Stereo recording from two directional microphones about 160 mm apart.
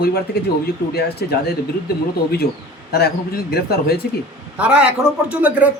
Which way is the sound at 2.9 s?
85° left.